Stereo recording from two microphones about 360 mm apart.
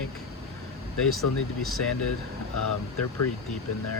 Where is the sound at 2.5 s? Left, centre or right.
Left.